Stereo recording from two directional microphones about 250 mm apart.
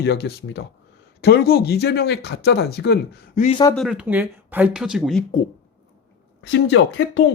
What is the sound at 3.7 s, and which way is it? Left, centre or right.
Speech, centre.